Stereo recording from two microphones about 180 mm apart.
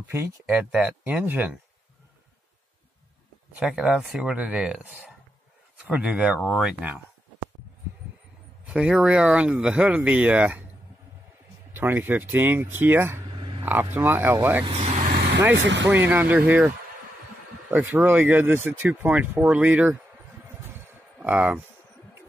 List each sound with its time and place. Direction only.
0.0 s speech: 10° right (ahead or behind)
3.5 s speech: 5° right (ahead or behind)
8.6 s speech: 5° right (ahead or behind)
11.7 s speech: 10° right (ahead or behind)
13.4 s a sound: 25° right (ahead or behind)
13.9 s speech: 10° right (ahead or behind)
14.6 s speech: 35° right (ahead or behind)
15.0 s vehicle: 65° right (ahead or behind)
15.5 s speech: 85° right
15.9 s speech: 10° right (ahead or behind)
21.2 s speech: 10° right (ahead or behind)